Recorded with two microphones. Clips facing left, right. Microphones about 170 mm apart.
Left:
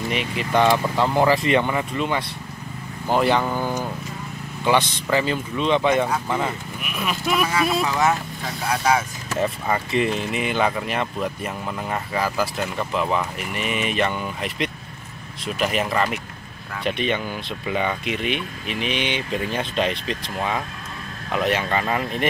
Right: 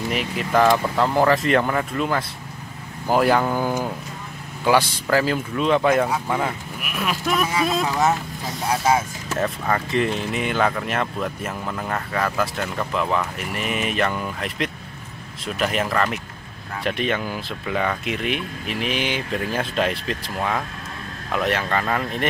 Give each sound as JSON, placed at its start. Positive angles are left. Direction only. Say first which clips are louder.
{"t": 0.1, "sound": "speech", "louder": "right 1 dB", "side_deg": 0}
{"t": 8.6, "sound": "speech", "louder": "right 1 dB", "side_deg": -25}
{"t": 9.4, "sound": "speech", "louder": "even", "side_deg": 5}